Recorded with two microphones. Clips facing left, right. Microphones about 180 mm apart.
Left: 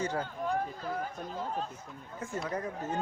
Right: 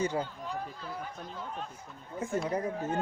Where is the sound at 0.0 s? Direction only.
15° right (ahead or behind).